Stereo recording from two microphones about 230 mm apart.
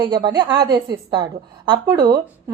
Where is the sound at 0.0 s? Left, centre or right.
Centre.